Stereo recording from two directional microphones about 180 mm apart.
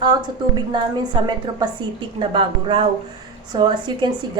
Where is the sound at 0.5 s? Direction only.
25° right (ahead or behind).